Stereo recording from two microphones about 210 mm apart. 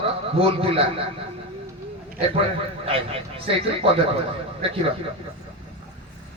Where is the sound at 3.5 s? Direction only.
25° right (ahead or behind).